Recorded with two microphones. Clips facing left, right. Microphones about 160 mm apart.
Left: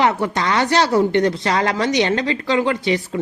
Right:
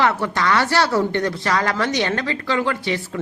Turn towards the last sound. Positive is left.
turn(degrees=20)  # may be behind; listen again after turning